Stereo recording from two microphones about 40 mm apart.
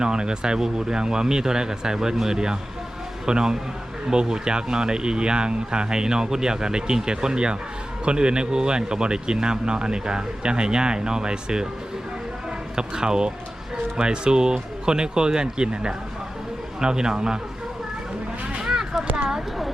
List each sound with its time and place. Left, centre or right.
0.0 s a man's voice: right
12.7 s a man's voice: centre
18.6 s a sound: centre